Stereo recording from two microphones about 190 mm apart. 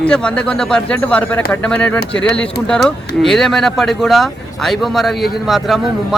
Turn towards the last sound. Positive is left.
turn(degrees=0)  # may be behind; listen again after turning